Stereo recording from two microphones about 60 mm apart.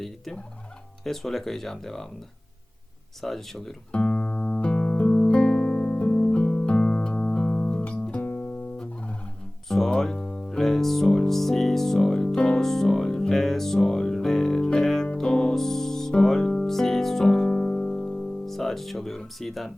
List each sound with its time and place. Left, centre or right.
1.0 s speech: centre
3.2 s speech: centre
3.9 s music: left
8.8 s music: centre
9.6 s music: centre
15.0 s music: centre
15.3 s music: centre